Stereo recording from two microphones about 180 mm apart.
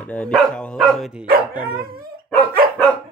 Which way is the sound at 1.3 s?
55° right (ahead or behind).